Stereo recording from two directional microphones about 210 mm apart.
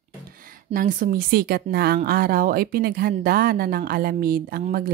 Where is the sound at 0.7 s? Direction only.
40° right (ahead or behind).